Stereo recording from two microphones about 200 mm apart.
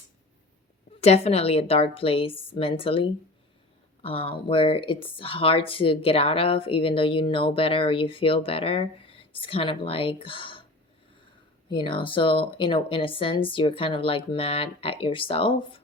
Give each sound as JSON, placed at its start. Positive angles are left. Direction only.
{"t": 1.0, "sound": "speech", "side_deg": 30}
{"t": 11.7, "sound": "speech", "side_deg": 25}